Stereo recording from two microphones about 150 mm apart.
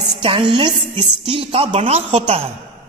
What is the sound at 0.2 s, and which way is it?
A woman's voice, 35° right (ahead or behind).